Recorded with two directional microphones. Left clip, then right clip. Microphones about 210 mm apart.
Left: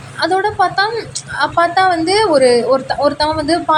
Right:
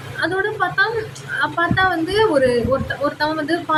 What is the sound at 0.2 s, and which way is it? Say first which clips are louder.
A woman's voice: left 6 dB; 20° left (ahead or behind).